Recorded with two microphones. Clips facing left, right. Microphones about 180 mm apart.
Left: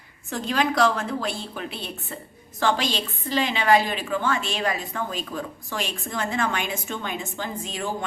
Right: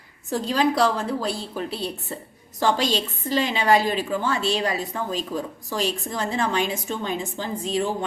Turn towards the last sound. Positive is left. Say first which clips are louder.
# right 5 dB
turn(degrees=-35)  # may be behind; listen again after turning